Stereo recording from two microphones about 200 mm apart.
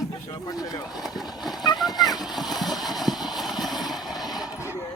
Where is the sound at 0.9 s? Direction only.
Centre (ahead or behind).